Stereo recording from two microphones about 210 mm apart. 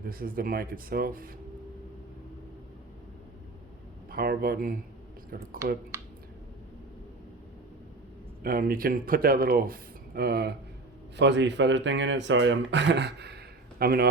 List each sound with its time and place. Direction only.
0.0 s speech: 45° right (ahead or behind)
4.1 s speech: 45° right (ahead or behind)
5.9 s a sound: 15° right (ahead or behind)
8.4 s speech: 45° right (ahead or behind)